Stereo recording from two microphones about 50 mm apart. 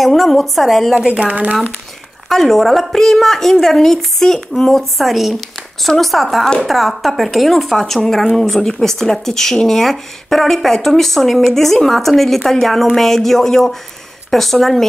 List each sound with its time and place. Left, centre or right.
0.0 s a woman's voice: centre
0.9 s speech: right
2.2 s a woman's voice: centre